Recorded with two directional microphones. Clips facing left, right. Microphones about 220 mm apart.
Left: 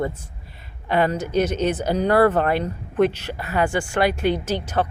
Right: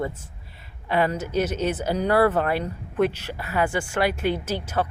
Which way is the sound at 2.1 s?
45° left (ahead or behind).